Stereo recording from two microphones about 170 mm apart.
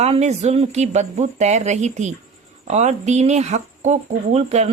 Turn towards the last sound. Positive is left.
turn(degrees=-40)  # may be behind; listen again after turning